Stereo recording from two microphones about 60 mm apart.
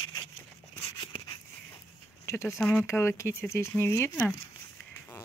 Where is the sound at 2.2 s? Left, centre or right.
Left.